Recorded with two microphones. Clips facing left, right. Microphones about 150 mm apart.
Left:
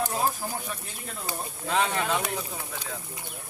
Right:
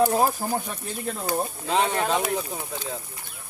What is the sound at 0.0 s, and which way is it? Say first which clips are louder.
Speech: right 7 dB; 50° right (ahead or behind).